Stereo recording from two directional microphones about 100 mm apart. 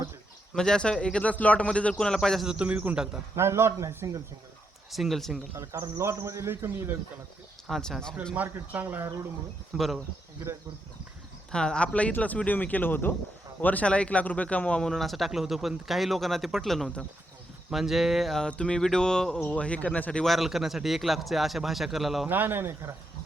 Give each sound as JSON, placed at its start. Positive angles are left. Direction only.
{"t": 0.5, "sound": "speech", "side_deg": 5}
{"t": 2.5, "sound": "speech", "side_deg": -15}
{"t": 3.3, "sound": "a man's voice", "side_deg": -25}
{"t": 4.9, "sound": "speech", "side_deg": 0}
{"t": 5.5, "sound": "a man's voice", "side_deg": -30}
{"t": 7.7, "sound": "speech", "side_deg": 5}
{"t": 8.4, "sound": "speech", "side_deg": -15}
{"t": 9.7, "sound": "speech", "side_deg": 0}
{"t": 11.5, "sound": "speech", "side_deg": 10}
{"t": 20.2, "sound": "speech", "side_deg": 0}
{"t": 22.3, "sound": "a man's voice", "side_deg": -20}